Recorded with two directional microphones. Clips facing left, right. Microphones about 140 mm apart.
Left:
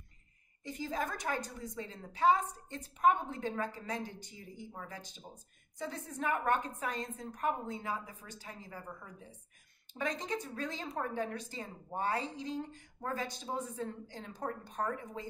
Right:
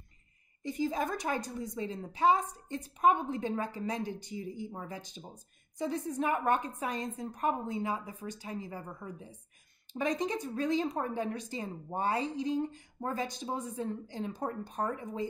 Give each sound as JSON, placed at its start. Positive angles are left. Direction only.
{"t": 0.7, "sound": "a woman's voice", "side_deg": -15}